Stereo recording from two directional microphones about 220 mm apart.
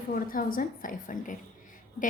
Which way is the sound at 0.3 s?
40° left (ahead or behind).